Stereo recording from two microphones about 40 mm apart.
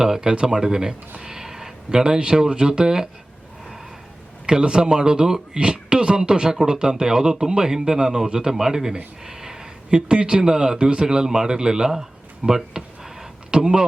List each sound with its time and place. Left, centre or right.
0.0 s speech: centre
1.2 s a sound: centre
1.9 s speech: right
4.4 s speech: right